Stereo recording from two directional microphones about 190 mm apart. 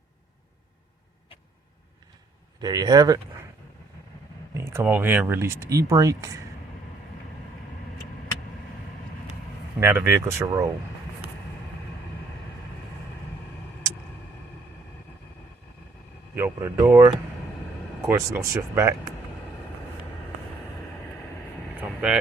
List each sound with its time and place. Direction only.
2.6 s speech: 20° right (ahead or behind)
4.5 s speech: 15° right (ahead or behind)
9.8 s speech: 15° right (ahead or behind)
16.3 s speech: 10° right (ahead or behind)
21.8 s vehicle: 5° right (ahead or behind)